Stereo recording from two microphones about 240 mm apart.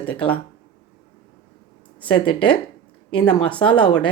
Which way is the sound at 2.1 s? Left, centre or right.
Left.